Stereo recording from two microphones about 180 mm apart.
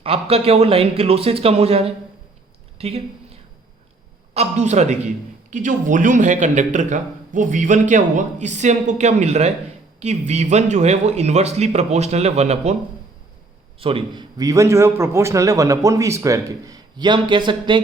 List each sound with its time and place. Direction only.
0.0 s speech: 35° right (ahead or behind)
4.4 s speech: 40° right (ahead or behind)
13.7 s a man's voice: 30° right (ahead or behind)